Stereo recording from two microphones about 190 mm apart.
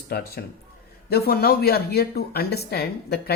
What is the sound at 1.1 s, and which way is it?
Speech, 55° left (ahead or behind).